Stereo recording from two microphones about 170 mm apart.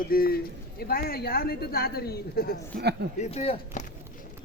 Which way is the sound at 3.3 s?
35° left (ahead or behind).